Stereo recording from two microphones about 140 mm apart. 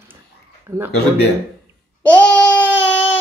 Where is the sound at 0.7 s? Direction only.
15° right (ahead or behind).